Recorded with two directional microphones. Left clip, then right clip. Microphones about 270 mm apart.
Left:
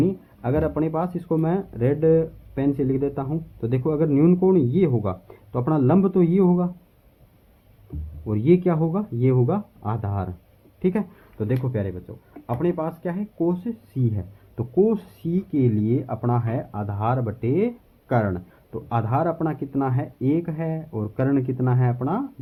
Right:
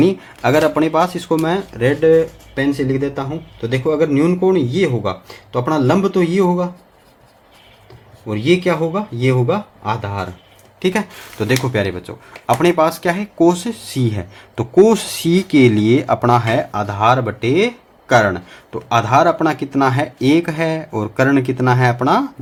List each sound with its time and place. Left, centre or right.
0.0 s speech: centre
5.5 s speech: centre
8.3 s speech: centre
11.3 s speech: centre